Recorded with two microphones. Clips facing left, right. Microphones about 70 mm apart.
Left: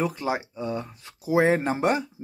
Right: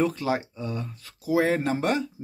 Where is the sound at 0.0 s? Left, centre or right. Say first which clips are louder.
Right 2 dB; centre.